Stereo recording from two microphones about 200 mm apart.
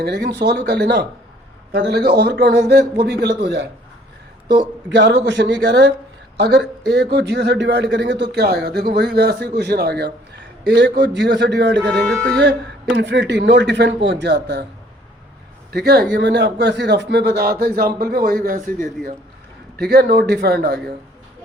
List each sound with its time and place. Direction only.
0.0 s a man's voice: 55° right (ahead or behind)
4.9 s a man's voice: 60° right (ahead or behind)
11.8 s speech: 5° left (ahead or behind)
12.8 s a man's voice: 60° right (ahead or behind)
15.7 s a man's voice: 55° right (ahead or behind)